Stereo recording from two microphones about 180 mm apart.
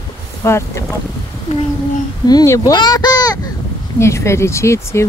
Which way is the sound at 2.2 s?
20° left (ahead or behind).